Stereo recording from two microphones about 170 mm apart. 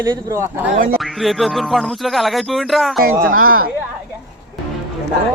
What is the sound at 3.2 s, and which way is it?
Speech, 60° right (ahead or behind).